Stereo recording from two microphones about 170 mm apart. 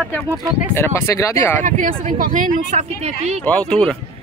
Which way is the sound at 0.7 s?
15° left (ahead or behind).